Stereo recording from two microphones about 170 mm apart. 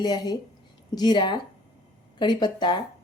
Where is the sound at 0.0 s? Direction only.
25° left (ahead or behind).